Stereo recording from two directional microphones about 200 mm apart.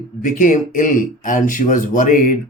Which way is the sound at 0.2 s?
40° left (ahead or behind).